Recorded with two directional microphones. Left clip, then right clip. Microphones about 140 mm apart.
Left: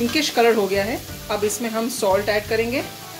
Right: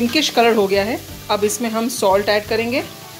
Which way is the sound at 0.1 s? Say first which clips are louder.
Right 3 dB; 60° right (ahead or behind).